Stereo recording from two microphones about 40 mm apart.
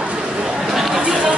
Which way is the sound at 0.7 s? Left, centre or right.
Centre.